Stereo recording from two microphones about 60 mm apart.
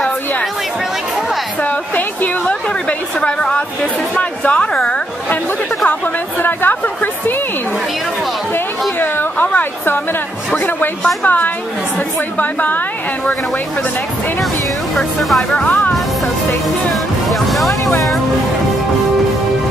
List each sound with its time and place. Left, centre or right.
1.6 s a sound: left
3.2 s speech: centre
6.4 s speech: left
9.0 s a sound: left
11.2 s a woman's voice: left
15.0 s speech: centre
15.5 s a woman's voice: left
17.3 s music: centre